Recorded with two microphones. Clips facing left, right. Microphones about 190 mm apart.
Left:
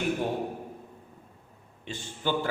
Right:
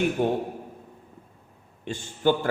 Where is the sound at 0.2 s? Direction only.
60° right (ahead or behind).